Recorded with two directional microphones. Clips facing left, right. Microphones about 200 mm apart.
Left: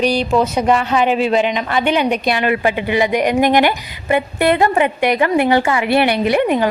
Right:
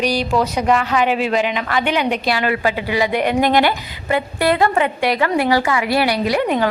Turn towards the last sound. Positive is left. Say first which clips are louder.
# left 3 dB
turn(degrees=25)  # may be behind; listen again after turning